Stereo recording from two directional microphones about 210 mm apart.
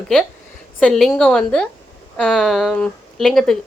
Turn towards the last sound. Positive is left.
turn(degrees=0)  # may be behind; listen again after turning